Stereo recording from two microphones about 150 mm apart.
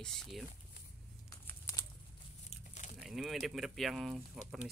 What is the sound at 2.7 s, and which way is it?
Vehicle, 55° left (ahead or behind).